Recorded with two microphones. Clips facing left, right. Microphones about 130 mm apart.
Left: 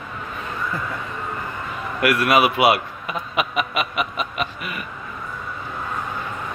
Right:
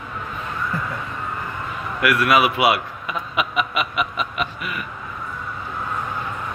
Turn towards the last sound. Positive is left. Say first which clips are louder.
# right 1 dB
turn(degrees=25)  # may be behind; listen again after turning